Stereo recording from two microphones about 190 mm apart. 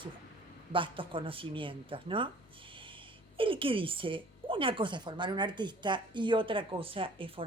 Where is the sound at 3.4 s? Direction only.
25° right (ahead or behind).